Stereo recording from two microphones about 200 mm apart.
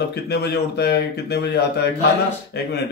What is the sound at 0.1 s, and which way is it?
Speech, 55° left (ahead or behind).